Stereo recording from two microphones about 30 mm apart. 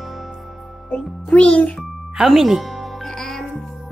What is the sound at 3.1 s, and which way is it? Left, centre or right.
Music, centre.